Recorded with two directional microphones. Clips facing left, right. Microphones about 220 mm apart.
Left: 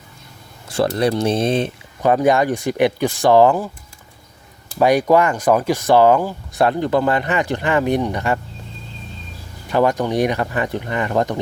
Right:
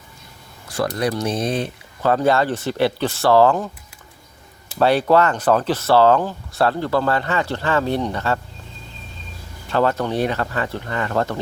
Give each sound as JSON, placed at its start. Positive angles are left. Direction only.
{"t": 0.9, "sound": "speech", "side_deg": 25}
{"t": 4.8, "sound": "speech", "side_deg": 15}
{"t": 9.6, "sound": "speech", "side_deg": 15}